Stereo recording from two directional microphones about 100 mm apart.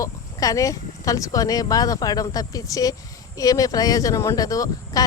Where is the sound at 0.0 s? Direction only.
35° left (ahead or behind).